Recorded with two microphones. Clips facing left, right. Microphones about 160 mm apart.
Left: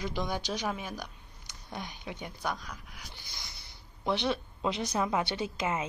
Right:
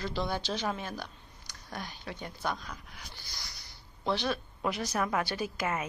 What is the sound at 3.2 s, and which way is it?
Speech, 20° left (ahead or behind).